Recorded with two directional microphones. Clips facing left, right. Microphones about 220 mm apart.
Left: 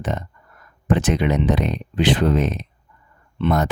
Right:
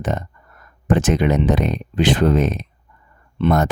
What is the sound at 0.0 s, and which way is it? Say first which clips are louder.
Speech: right 2 dB; 45° right (ahead or behind).